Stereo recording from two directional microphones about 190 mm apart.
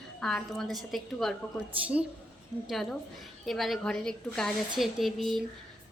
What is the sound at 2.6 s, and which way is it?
A woman's voice, centre (ahead or behind).